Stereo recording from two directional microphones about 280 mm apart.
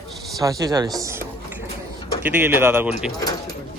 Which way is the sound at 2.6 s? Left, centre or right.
Centre.